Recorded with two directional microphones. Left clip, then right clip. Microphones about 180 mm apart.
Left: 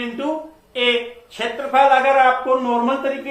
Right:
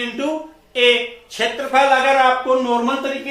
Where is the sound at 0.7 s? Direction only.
25° right (ahead or behind).